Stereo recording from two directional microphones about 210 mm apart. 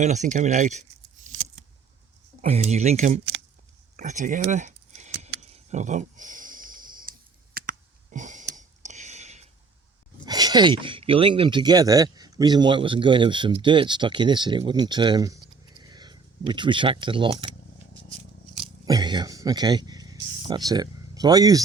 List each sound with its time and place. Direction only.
0.0 s speech: 35° right (ahead or behind)
2.4 s speech: 30° right (ahead or behind)
3.9 s a sound: 35° right (ahead or behind)
10.2 s speech: 20° right (ahead or behind)
18.9 s speech: 20° right (ahead or behind)